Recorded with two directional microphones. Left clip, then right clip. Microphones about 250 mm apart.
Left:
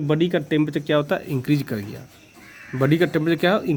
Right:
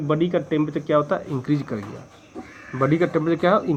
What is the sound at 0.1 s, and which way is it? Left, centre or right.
Speech, left.